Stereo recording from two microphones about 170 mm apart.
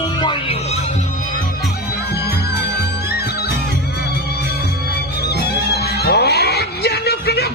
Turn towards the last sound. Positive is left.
turn(degrees=70)  # may be behind; listen again after turning